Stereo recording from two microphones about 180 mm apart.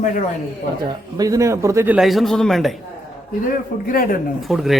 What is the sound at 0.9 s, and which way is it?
Speech, 20° right (ahead or behind).